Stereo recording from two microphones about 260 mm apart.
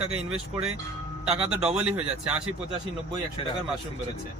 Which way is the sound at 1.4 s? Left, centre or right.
Centre.